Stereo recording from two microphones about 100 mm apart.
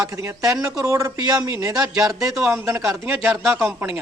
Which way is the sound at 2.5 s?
25° right (ahead or behind).